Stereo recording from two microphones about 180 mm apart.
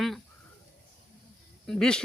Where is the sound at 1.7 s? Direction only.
5° left (ahead or behind).